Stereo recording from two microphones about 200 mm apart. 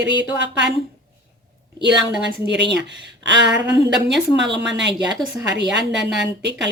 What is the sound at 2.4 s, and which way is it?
A woman's voice, 60° right (ahead or behind).